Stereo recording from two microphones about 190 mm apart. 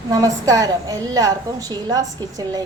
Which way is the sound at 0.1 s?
15° right (ahead or behind).